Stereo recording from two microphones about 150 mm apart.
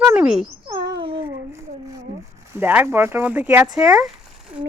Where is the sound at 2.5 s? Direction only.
10° right (ahead or behind).